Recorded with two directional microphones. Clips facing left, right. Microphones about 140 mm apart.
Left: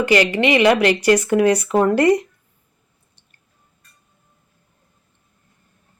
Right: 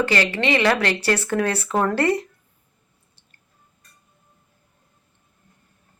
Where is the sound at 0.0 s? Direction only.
15° left (ahead or behind).